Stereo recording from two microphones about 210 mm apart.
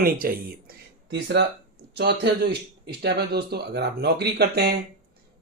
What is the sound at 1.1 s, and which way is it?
Speech, 55° right (ahead or behind).